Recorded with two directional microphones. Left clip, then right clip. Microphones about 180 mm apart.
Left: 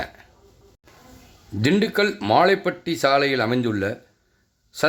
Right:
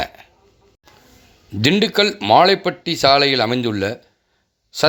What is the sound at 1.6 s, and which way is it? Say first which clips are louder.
Speech: right 4 dB; 20° right (ahead or behind).